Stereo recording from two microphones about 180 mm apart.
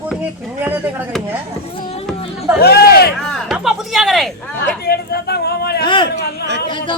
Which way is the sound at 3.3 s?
Centre (ahead or behind).